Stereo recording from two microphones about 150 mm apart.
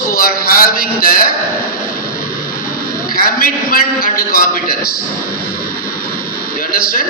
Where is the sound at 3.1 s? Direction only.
80° left.